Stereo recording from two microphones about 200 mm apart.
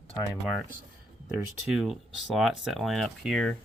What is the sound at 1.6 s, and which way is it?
Speech, centre (ahead or behind).